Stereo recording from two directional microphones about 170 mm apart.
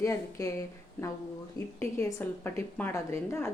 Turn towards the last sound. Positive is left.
turn(degrees=15)  # may be behind; listen again after turning